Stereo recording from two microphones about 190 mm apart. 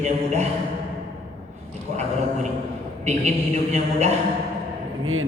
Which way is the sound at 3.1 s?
35° right (ahead or behind).